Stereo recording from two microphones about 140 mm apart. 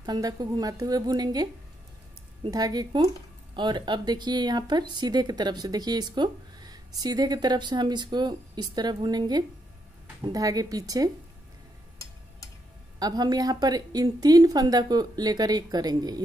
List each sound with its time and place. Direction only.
0.0 s a woman's voice: 25° right (ahead or behind)
13.0 s a woman's voice: 30° right (ahead or behind)